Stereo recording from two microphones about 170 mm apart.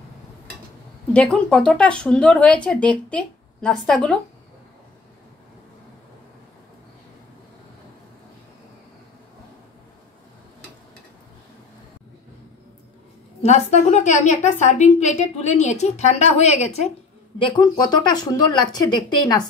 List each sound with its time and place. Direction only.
1.1 s speech: 5° left (ahead or behind)
13.4 s a woman's voice: 40° left (ahead or behind)
17.4 s speech: 25° left (ahead or behind)